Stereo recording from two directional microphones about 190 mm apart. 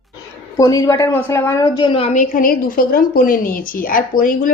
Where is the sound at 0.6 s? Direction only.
15° left (ahead or behind).